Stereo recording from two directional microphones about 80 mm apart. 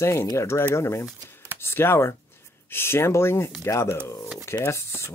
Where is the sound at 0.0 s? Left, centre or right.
Left.